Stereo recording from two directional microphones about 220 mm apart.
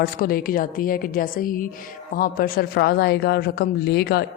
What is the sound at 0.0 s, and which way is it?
A woman's voice, 40° left (ahead or behind).